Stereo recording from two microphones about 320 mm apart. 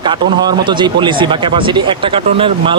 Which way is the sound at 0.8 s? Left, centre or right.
Centre.